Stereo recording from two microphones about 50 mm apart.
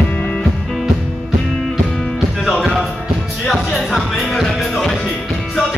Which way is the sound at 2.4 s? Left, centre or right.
Centre.